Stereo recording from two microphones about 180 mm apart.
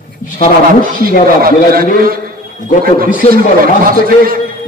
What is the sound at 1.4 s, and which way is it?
Speech, 55° right (ahead or behind).